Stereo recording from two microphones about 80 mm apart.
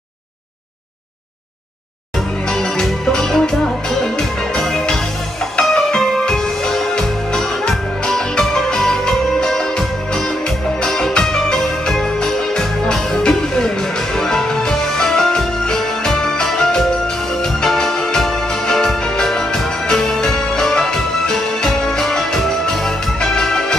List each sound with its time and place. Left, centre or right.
2.5 s music: centre